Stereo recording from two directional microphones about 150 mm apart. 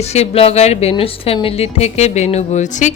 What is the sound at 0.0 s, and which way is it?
A woman's voice, 45° left (ahead or behind).